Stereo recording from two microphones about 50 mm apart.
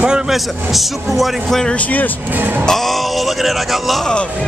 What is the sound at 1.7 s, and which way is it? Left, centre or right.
Speech, left.